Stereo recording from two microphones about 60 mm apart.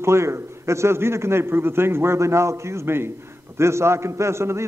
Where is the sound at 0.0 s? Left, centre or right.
Right.